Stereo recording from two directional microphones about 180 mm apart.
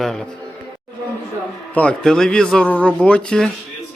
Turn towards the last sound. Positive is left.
turn(degrees=5)  # may be behind; listen again after turning